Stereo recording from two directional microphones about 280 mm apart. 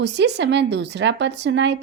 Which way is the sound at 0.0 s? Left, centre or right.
Right.